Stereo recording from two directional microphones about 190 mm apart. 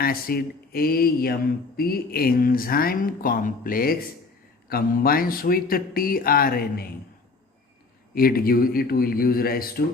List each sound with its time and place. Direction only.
0.0 s speech: 50° left (ahead or behind)
8.1 s speech: 50° left (ahead or behind)